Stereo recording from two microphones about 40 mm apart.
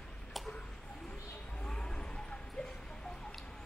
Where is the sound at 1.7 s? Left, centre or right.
Left.